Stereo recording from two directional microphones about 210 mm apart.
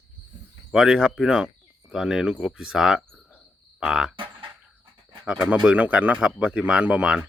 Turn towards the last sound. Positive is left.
turn(degrees=-5)  # may be behind; listen again after turning